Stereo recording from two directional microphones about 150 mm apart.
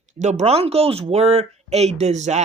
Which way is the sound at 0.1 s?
50° right (ahead or behind).